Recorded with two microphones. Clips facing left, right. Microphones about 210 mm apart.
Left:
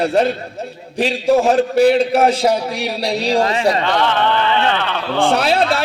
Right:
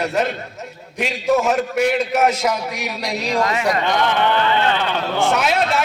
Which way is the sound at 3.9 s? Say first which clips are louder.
Left 2 dB; 15° right (ahead or behind).